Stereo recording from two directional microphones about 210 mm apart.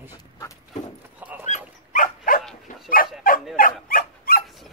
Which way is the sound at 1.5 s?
40° left (ahead or behind).